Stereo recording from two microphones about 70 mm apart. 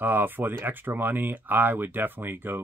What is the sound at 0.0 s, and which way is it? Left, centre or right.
Speech, right.